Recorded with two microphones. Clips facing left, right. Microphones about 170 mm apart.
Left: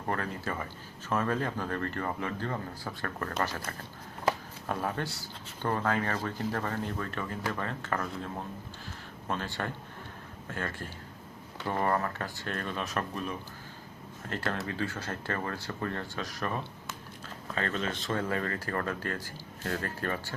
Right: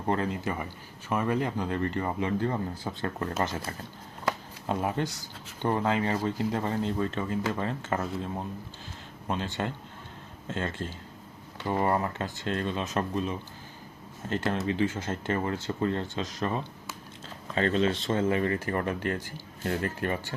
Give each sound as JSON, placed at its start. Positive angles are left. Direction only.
{"t": 0.0, "sound": "speech", "side_deg": -20}
{"t": 9.2, "sound": "speech", "side_deg": -20}